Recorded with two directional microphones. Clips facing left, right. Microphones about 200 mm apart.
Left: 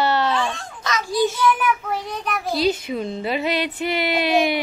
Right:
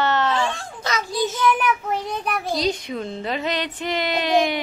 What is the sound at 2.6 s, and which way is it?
Speech, 5° left (ahead or behind).